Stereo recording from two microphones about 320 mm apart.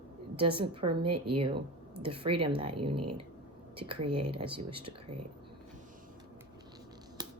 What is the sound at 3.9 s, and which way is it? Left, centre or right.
Speech, right.